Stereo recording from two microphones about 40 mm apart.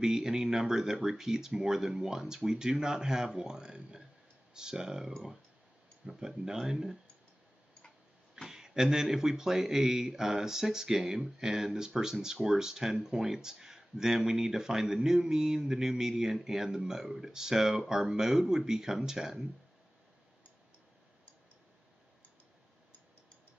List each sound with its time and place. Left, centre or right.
0.0 s speech: centre
8.5 s speech: centre